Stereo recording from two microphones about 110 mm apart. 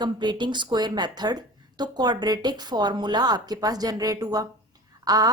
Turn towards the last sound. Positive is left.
turn(degrees=-35)  # may be behind; listen again after turning